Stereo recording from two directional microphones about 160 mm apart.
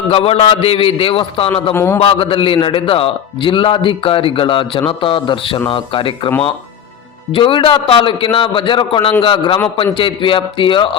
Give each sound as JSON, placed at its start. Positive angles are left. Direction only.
{"t": 0.1, "sound": "a man's voice", "side_deg": 35}
{"t": 1.7, "sound": "a man's voice", "side_deg": 15}
{"t": 2.0, "sound": "a man's voice", "side_deg": 35}
{"t": 7.3, "sound": "a man's voice", "side_deg": 30}